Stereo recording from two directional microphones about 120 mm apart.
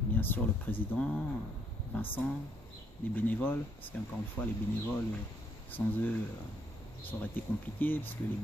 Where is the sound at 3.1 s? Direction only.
15° left (ahead or behind).